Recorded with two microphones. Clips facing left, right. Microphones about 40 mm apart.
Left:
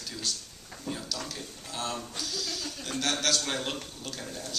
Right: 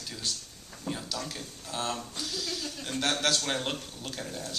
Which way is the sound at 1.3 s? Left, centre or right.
Right.